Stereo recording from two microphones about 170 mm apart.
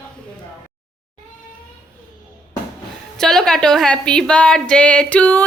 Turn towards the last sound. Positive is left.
turn(degrees=10)  # may be behind; listen again after turning